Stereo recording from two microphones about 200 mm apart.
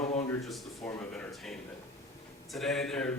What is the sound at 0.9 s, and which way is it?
A man's voice, 10° left (ahead or behind).